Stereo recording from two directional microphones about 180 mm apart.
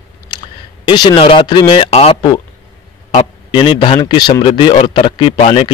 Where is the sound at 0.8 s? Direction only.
25° left (ahead or behind).